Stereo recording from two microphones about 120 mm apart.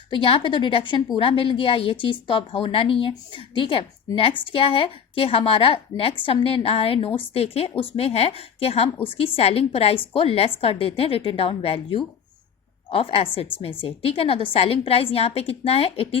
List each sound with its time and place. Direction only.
0.1 s a woman's voice: 50° left (ahead or behind)